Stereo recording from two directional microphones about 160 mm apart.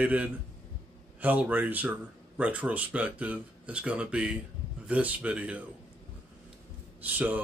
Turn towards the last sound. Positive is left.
turn(degrees=-10)  # may be behind; listen again after turning